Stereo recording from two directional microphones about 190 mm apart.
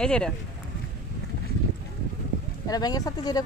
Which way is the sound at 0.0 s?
5° left (ahead or behind).